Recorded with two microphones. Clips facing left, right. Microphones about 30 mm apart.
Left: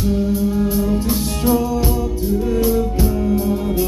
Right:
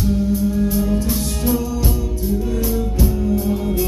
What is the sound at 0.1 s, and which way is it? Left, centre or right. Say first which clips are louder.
Music: left 1 dB; centre.